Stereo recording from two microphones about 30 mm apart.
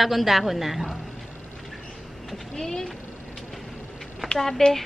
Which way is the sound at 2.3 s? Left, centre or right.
Centre.